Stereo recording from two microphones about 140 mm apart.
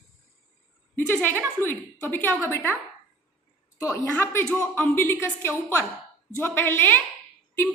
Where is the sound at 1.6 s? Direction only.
15° left (ahead or behind).